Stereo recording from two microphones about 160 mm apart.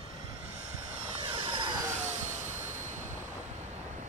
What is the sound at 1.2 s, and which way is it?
Vehicle, 30° right (ahead or behind).